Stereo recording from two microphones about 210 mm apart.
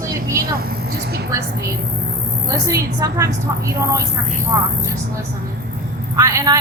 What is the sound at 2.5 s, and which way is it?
Speech, 15° right (ahead or behind).